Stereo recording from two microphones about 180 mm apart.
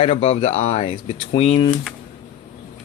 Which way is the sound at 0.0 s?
35° left (ahead or behind).